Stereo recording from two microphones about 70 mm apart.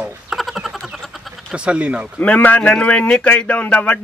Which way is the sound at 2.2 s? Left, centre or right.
Left.